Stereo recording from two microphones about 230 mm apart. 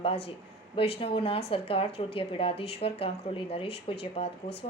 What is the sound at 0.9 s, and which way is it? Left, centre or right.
A woman's voice, left.